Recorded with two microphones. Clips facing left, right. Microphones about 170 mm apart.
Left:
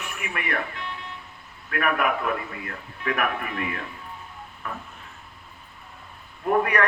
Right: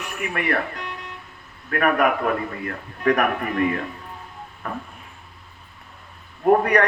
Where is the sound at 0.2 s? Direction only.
40° right (ahead or behind).